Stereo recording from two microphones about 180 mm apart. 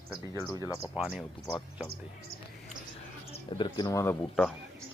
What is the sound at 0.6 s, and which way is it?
Speech, 15° left (ahead or behind).